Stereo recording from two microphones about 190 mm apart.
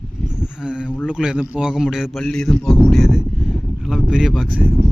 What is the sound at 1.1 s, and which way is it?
A man's voice, 5° right (ahead or behind).